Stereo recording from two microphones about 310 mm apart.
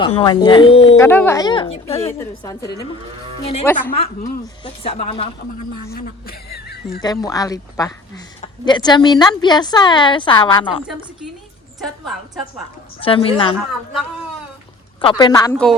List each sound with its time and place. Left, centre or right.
0.0 s speech: centre
0.9 s speech: centre
3.9 s speech: centre
7.0 s speech: centre
13.0 s speech: centre
15.0 s speech: centre